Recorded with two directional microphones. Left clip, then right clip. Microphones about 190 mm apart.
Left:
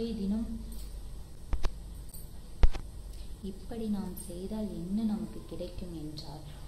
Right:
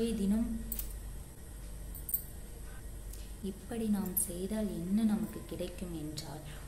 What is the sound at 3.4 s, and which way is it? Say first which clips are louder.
A woman's voice: right 1 dB; 10° right (ahead or behind).